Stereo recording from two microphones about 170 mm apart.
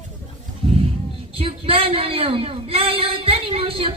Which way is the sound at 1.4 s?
35° right (ahead or behind).